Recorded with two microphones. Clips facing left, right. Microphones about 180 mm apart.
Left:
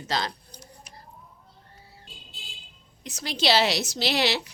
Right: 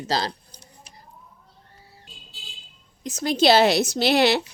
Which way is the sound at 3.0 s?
50° right (ahead or behind).